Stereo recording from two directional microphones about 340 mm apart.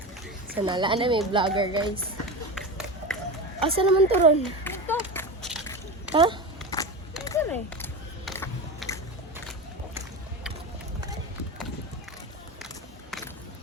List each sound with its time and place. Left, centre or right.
0.5 s a woman's voice: centre
2.6 s run: centre
3.6 s a woman's voice: centre
4.6 s a sound: centre
6.1 s a woman's voice: centre
6.6 s a sound: centre
11.0 s clip-clop: centre